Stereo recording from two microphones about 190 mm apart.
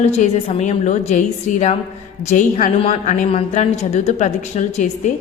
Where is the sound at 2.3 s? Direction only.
40° left (ahead or behind).